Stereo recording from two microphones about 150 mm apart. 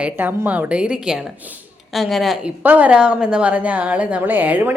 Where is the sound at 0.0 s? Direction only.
10° right (ahead or behind).